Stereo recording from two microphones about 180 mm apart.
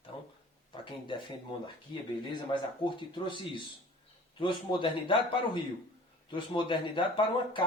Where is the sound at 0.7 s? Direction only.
25° left (ahead or behind).